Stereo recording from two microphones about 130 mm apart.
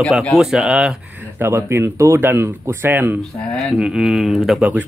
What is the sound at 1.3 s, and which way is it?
Speech, 20° right (ahead or behind).